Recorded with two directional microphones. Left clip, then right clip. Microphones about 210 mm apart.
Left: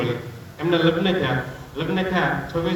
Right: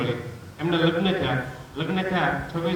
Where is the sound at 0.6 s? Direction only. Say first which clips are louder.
Left 3 dB; 25° left (ahead or behind).